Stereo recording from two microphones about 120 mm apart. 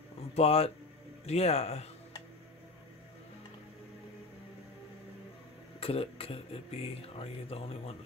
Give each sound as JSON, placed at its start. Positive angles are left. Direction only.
{"t": 0.3, "sound": "speech", "side_deg": 55}
{"t": 5.8, "sound": "speech", "side_deg": 50}